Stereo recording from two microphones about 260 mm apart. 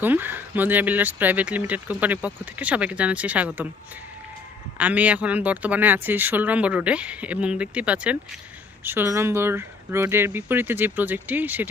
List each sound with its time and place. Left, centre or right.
0.0 s speech: centre
4.8 s speech: centre